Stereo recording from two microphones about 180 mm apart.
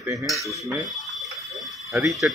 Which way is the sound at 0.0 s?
15° right (ahead or behind).